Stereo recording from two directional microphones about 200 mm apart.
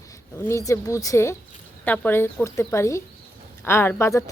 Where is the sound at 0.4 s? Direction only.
15° left (ahead or behind).